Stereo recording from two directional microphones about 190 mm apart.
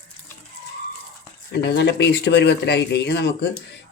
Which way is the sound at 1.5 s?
60° left (ahead or behind).